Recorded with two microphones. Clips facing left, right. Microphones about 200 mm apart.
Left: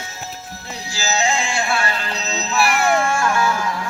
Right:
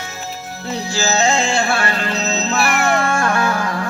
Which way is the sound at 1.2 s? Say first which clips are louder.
Right 3 dB; 40° right (ahead or behind).